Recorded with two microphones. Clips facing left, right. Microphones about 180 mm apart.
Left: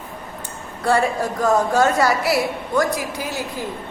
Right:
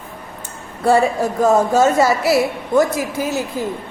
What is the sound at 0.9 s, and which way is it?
A woman's voice, 25° right (ahead or behind).